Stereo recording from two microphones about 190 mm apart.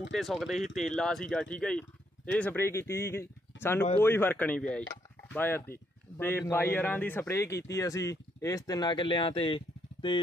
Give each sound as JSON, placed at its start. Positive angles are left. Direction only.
{"t": 0.0, "sound": "speech", "side_deg": 0}